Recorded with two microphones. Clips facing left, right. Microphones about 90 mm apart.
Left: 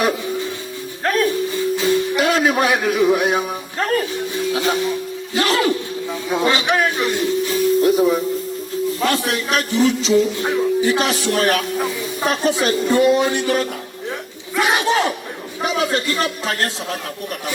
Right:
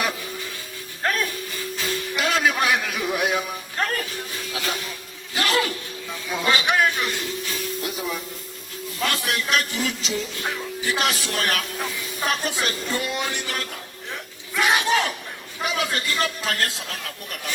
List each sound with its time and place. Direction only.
2.1 s a man's voice: 40° left (ahead or behind)